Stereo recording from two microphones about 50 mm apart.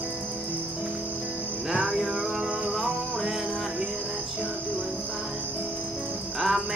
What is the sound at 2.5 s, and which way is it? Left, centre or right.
Music, right.